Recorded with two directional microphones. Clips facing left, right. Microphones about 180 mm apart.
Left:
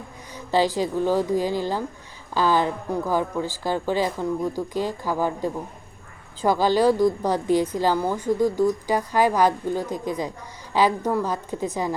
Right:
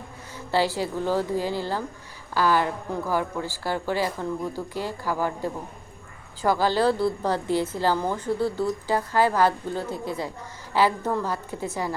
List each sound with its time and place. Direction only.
0.3 s a woman's voice: 15° left (ahead or behind)